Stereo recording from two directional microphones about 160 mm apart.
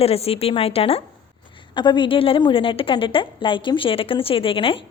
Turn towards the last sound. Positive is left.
turn(degrees=35)  # may be behind; listen again after turning